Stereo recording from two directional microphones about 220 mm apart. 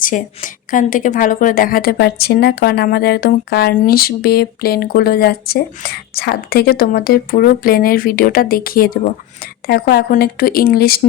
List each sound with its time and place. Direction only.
0.0 s a woman's voice: 35° left (ahead or behind)